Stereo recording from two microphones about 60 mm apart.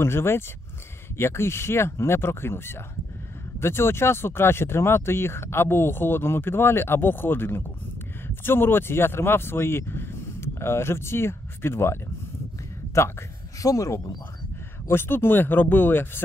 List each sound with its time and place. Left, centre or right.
0.0 s speech: left
13.6 s speech: left
14.9 s speech: left